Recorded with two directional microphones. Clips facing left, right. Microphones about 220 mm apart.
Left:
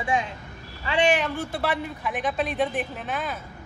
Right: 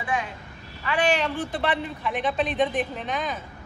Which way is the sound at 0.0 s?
25° left (ahead or behind).